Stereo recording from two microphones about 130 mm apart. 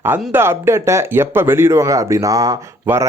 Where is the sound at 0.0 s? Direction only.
15° right (ahead or behind).